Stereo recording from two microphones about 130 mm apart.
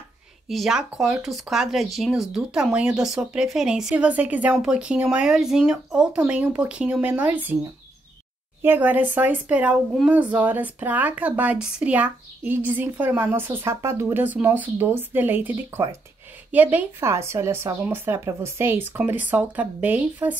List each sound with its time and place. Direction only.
0.5 s speech: centre (ahead or behind)
8.6 s speech: 15° right (ahead or behind)